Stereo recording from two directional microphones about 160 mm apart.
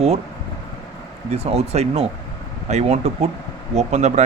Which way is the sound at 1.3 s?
40° right (ahead or behind).